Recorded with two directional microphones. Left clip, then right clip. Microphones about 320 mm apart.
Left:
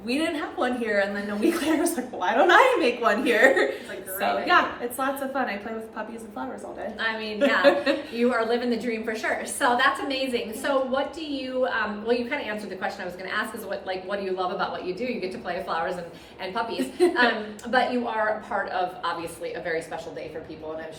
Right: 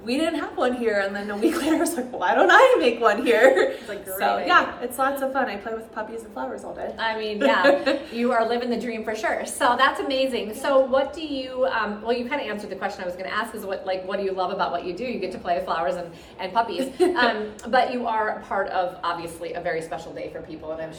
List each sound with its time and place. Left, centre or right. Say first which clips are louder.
0.1 s a woman's voice: right 2 dB; centre
7.0 s a woman's voice: right 2 dB; centre